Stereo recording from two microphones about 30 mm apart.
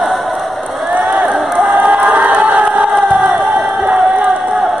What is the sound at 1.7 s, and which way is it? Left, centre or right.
Crowd, right.